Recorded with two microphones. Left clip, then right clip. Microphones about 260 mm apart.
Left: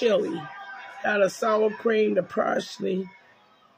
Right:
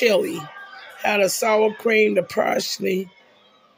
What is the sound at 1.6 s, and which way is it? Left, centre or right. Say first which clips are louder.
Speech: right 6 dB; right.